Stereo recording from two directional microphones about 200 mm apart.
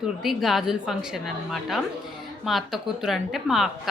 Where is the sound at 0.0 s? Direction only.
Centre (ahead or behind).